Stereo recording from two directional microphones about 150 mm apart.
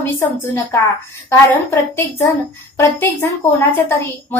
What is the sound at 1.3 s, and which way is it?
A woman's voice, 15° left (ahead or behind).